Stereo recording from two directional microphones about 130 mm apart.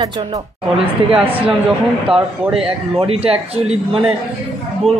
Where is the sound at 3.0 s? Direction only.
45° right (ahead or behind).